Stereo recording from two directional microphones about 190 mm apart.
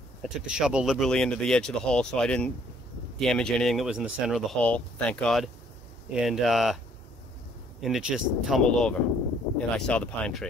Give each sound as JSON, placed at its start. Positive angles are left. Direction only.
{"t": 0.2, "sound": "speech", "side_deg": -5}
{"t": 7.8, "sound": "speech", "side_deg": 0}